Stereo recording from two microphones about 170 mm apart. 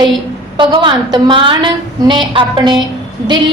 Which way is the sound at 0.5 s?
30° right (ahead or behind).